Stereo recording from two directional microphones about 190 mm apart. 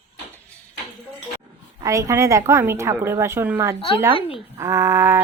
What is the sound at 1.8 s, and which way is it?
A woman's voice, 15° right (ahead or behind).